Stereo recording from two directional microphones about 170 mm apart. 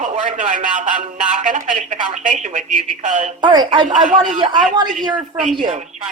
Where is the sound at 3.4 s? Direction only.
25° right (ahead or behind).